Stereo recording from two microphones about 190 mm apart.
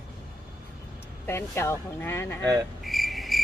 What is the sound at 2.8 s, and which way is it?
Cricket, centre (ahead or behind).